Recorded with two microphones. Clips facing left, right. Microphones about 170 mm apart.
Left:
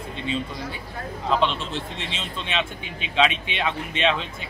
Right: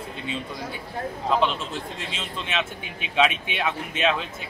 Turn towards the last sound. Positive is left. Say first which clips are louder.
# left 1 dB
turn(degrees=-5)  # may be behind; listen again after turning